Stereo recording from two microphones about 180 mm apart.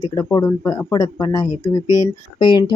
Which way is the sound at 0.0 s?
20° left (ahead or behind).